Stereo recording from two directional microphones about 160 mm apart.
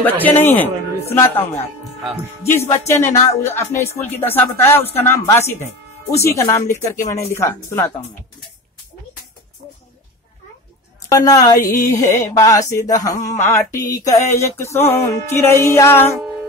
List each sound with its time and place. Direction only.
0.0 s speech: 10° left (ahead or behind)
2.4 s speech: 15° left (ahead or behind)
11.1 s speech: 25° left (ahead or behind)